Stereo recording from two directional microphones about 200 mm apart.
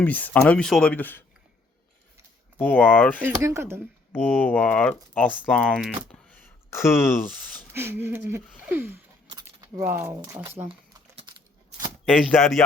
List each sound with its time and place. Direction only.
0.0 s speech: 10° left (ahead or behind)
2.6 s speech: 10° left (ahead or behind)
3.2 s speech: 10° right (ahead or behind)
4.1 s speech: 10° left (ahead or behind)
7.7 s speech: 10° right (ahead or behind)
9.3 s a sound: 15° right (ahead or behind)
10.4 s speech: 20° right (ahead or behind)
10.7 s typing: 30° right (ahead or behind)
12.1 s speech: 5° left (ahead or behind)